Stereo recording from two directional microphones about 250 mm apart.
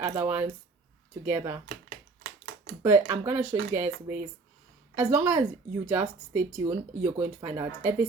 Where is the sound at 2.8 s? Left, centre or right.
Centre.